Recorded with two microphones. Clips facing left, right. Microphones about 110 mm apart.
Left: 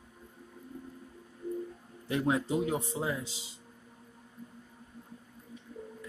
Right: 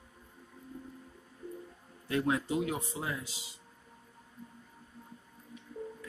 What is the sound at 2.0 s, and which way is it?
A man's voice, 25° left (ahead or behind).